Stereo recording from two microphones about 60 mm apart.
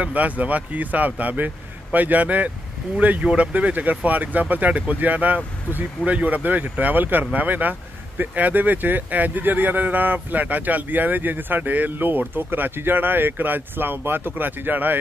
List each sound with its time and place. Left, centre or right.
0.0 s speech: right